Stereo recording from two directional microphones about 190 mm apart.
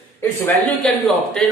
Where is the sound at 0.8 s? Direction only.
5° left (ahead or behind).